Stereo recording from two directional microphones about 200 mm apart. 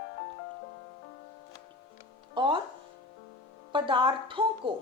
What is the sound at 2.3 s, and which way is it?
Speech, 25° right (ahead or behind).